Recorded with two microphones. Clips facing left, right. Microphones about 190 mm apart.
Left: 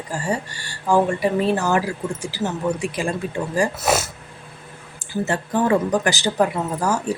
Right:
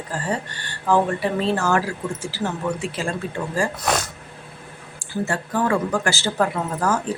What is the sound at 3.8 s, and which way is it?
Speech, 5° left (ahead or behind).